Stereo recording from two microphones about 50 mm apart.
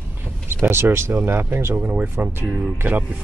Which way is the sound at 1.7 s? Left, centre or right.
Right.